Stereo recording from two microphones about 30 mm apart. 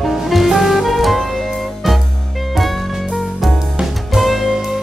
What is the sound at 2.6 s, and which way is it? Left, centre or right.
Music, centre.